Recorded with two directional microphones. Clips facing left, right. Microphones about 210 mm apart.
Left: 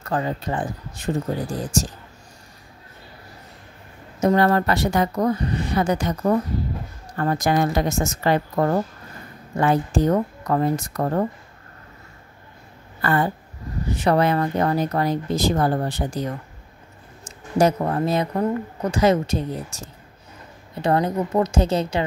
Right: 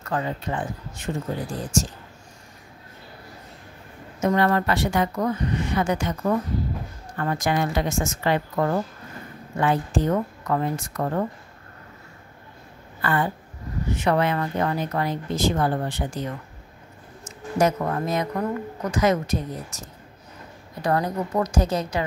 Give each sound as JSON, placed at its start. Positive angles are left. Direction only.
{"t": 0.0, "sound": "speech", "side_deg": 35}
{"t": 4.2, "sound": "speech", "side_deg": 35}
{"t": 13.0, "sound": "speech", "side_deg": 40}
{"t": 17.6, "sound": "speech", "side_deg": 30}
{"t": 20.8, "sound": "a woman's voice", "side_deg": 25}